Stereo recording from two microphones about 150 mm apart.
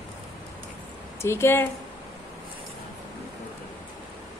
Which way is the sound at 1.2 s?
15° left (ahead or behind).